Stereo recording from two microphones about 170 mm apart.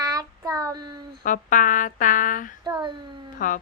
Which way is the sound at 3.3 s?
50° left (ahead or behind).